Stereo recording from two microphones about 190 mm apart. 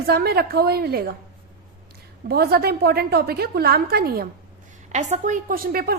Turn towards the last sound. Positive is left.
turn(degrees=-50)  # may be behind; listen again after turning